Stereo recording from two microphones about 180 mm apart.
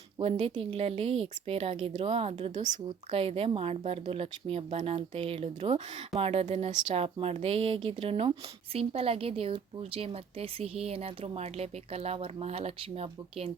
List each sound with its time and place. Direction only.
0.2 s a woman's voice: 35° right (ahead or behind)